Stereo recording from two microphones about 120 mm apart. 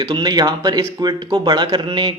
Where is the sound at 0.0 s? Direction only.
35° right (ahead or behind).